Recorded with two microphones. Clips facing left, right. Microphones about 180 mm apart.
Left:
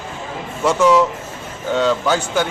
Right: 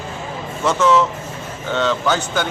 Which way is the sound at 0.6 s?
10° left (ahead or behind).